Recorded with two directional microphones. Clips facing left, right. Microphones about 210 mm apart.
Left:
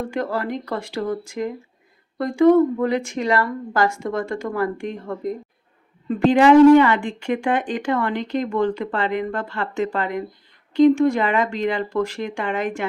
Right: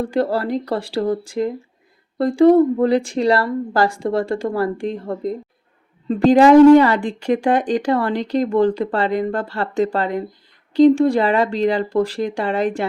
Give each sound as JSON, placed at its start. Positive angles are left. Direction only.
{"t": 0.0, "sound": "a woman's voice", "side_deg": -35}